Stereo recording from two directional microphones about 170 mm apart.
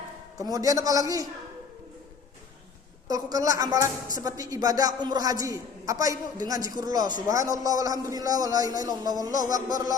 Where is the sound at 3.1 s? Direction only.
20° right (ahead or behind).